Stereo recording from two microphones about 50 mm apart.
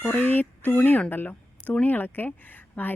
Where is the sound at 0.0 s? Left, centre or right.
Left.